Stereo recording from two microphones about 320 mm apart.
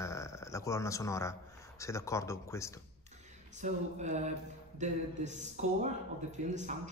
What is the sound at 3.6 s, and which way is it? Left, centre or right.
A man's voice, right.